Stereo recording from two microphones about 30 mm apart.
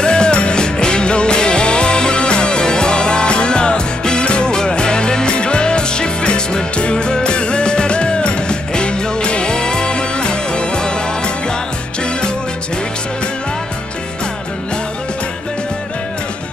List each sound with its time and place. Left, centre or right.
0.0 s music: left